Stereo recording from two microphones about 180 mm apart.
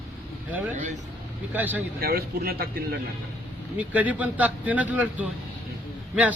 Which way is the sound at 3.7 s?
10° right (ahead or behind).